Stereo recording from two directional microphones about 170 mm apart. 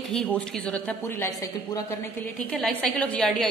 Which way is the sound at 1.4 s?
20° left (ahead or behind).